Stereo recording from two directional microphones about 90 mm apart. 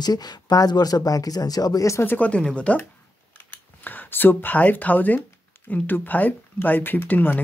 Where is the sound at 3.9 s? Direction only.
20° left (ahead or behind).